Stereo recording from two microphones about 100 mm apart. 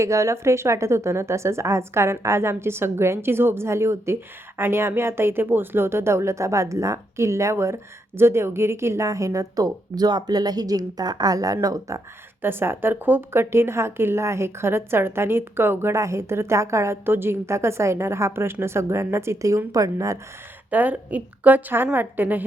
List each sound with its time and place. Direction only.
0.0 s a woman's voice: 30° right (ahead or behind)
12.4 s a woman's voice: 20° right (ahead or behind)
20.7 s a woman's voice: 15° right (ahead or behind)